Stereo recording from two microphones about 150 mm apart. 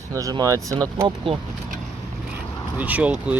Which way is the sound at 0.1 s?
25° right (ahead or behind).